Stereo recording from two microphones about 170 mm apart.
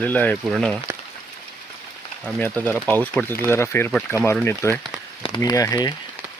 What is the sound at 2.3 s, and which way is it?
Speech, 10° left (ahead or behind).